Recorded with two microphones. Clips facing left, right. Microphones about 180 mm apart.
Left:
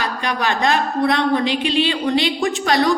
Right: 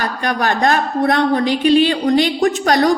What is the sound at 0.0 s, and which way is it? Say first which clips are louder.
A woman's voice: right 3 dB; 45° right (ahead or behind).